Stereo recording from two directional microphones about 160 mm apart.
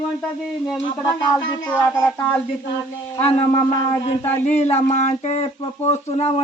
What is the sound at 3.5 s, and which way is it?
Speech, 20° left (ahead or behind).